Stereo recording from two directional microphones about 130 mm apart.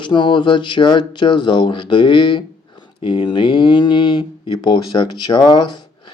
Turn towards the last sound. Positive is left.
turn(degrees=35)  # may be behind; listen again after turning